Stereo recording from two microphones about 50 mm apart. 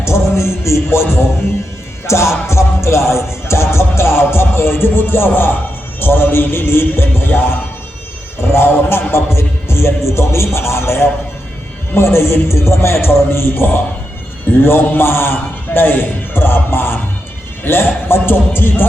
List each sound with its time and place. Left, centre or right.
0.0 s music: left
15.7 s a man's voice: left
17.6 s music: left